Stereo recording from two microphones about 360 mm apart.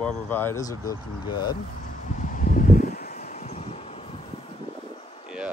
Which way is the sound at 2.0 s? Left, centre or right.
Left.